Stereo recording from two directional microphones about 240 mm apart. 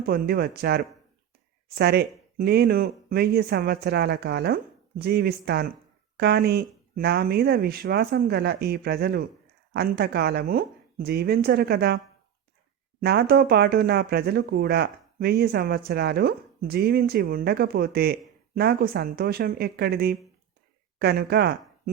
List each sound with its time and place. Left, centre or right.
0.0 s speech: right
13.0 s speech: right